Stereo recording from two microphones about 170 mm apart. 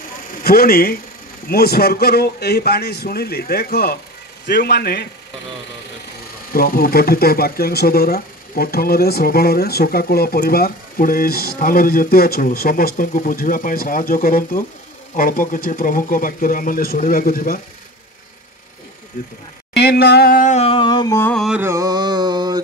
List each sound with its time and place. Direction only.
0.3 s a man's voice: 60° left (ahead or behind)
6.5 s speech: 60° left (ahead or behind)
19.2 s speech: 55° left (ahead or behind)
19.7 s a sound: 70° left (ahead or behind); by 21.2 s 25° left (ahead or behind)
21.2 s carnatic music: 5° left (ahead or behind)
21.5 s mantra: 15° right (ahead or behind)